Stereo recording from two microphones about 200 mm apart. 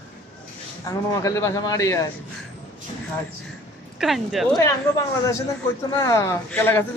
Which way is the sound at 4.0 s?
Centre (ahead or behind).